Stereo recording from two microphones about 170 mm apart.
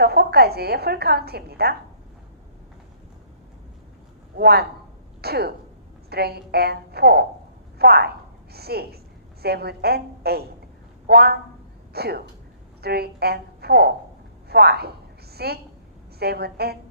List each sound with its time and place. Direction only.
0.0 s a woman's voice: 70° right (ahead or behind)
4.4 s a woman's voice: 70° right (ahead or behind)